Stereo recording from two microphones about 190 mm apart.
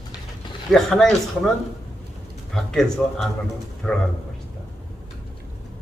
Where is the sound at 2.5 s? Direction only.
Centre (ahead or behind).